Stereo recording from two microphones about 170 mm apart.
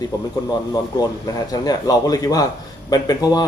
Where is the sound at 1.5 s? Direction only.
20° left (ahead or behind).